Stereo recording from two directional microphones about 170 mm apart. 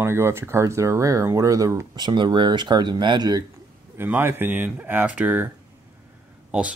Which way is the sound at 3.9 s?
10° right (ahead or behind).